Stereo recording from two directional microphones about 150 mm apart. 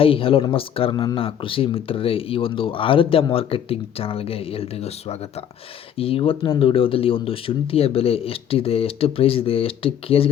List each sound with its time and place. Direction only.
0.0 s speech: 40° left (ahead or behind)